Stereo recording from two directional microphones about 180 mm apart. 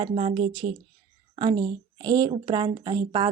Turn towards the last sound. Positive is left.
turn(degrees=-25)  # may be behind; listen again after turning